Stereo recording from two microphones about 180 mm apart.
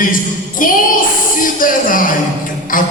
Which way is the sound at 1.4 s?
50° left (ahead or behind).